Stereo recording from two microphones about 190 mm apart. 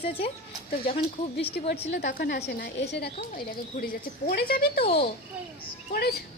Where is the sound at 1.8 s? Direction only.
60° left (ahead or behind).